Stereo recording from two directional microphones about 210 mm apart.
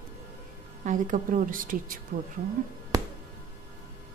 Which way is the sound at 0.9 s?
40° right (ahead or behind).